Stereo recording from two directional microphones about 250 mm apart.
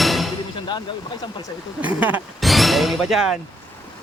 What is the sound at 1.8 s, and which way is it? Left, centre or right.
Speech, centre.